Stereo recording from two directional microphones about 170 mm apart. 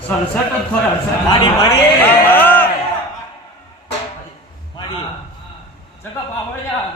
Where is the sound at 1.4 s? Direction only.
20° left (ahead or behind).